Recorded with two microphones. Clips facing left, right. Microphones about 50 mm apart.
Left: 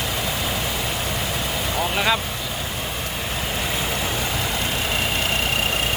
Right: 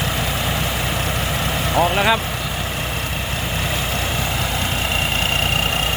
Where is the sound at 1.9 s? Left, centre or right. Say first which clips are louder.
Even; centre.